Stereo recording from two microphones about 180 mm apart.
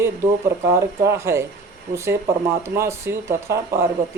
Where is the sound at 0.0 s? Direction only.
15° right (ahead or behind).